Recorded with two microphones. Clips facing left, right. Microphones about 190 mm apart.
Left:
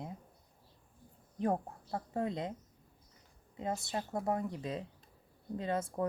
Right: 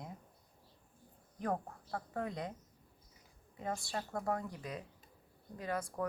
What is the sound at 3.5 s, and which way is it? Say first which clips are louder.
Speech: left 3 dB; 20° left (ahead or behind).